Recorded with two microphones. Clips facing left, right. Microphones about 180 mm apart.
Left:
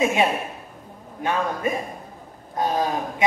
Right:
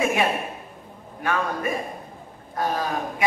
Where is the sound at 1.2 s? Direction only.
20° left (ahead or behind).